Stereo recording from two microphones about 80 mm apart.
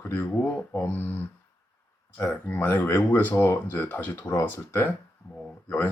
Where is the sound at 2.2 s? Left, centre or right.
Centre.